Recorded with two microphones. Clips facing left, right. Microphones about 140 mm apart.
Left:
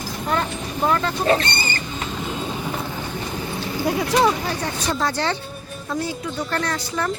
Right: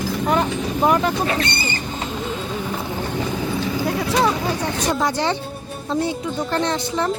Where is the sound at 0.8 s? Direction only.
15° right (ahead or behind).